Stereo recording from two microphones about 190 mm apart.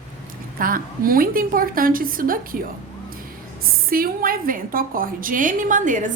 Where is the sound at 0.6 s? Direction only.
50° right (ahead or behind).